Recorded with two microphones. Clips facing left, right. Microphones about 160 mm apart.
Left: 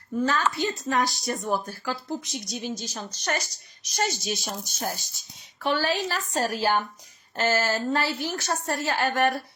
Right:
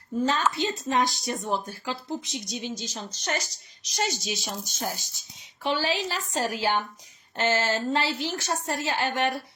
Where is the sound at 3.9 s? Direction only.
50° left (ahead or behind).